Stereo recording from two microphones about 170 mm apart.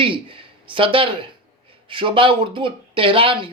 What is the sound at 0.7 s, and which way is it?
Speech, 30° right (ahead or behind).